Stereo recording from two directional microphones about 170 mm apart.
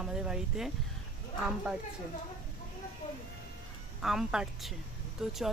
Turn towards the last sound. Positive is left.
turn(degrees=0)  # may be behind; listen again after turning